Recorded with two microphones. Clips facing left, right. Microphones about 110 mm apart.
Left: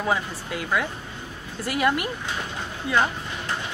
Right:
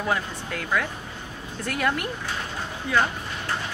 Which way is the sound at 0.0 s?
5° left (ahead or behind).